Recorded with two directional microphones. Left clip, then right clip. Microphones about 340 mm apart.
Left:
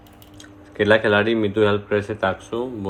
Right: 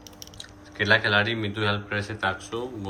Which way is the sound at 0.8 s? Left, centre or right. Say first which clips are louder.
Left 5 dB; centre.